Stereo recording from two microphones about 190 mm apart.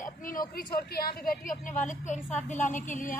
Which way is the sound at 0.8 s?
55° left (ahead or behind).